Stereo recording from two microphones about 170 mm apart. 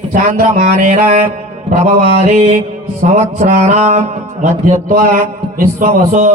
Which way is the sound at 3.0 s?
45° right (ahead or behind).